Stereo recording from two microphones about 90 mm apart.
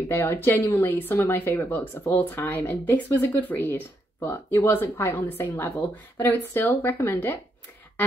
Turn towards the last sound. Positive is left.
turn(degrees=25)  # may be behind; listen again after turning